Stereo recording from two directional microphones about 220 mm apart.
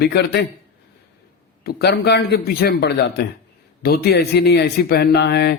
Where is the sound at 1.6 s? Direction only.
45° left (ahead or behind).